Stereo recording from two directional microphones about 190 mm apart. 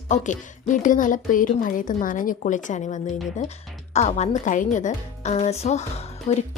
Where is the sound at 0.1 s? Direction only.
40° left (ahead or behind).